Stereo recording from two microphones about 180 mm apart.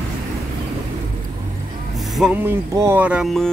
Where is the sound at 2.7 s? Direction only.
15° right (ahead or behind).